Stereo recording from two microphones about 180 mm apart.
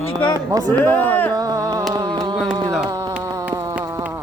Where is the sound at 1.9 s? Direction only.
20° right (ahead or behind).